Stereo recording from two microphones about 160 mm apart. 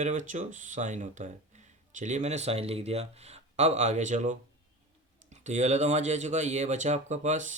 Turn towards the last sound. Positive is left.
turn(degrees=-50)  # may be behind; listen again after turning